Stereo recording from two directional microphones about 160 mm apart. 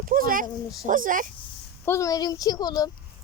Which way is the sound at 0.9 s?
55° right (ahead or behind).